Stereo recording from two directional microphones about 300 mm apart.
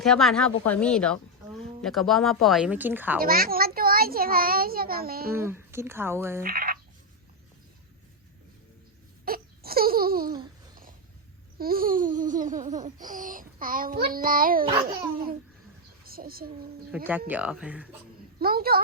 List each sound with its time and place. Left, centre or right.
0.0 s a woman's voice: centre
3.2 s a child's voice: right
5.3 s speech: centre
6.4 s babbling: right
9.2 s a sound: right
11.5 s babbling: right
16.0 s speech: right
16.9 s a woman's voice: centre
18.3 s a woman's voice: right